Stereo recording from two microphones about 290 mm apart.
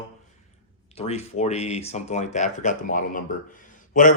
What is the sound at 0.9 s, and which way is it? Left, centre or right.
Speech, left.